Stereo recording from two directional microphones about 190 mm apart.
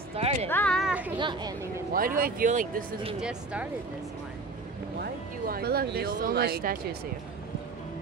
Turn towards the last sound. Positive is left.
turn(degrees=-50)  # may be behind; listen again after turning